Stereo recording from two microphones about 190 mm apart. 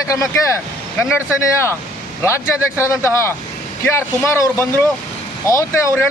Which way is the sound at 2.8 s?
15° left (ahead or behind).